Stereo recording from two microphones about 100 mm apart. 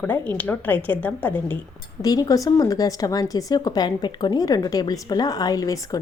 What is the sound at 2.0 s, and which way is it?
A woman's voice, 40° left (ahead or behind).